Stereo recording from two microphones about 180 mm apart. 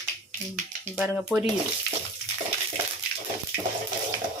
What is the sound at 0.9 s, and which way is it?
Speech, 5° right (ahead or behind).